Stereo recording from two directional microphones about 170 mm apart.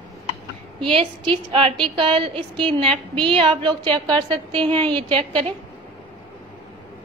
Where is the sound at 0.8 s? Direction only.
30° right (ahead or behind).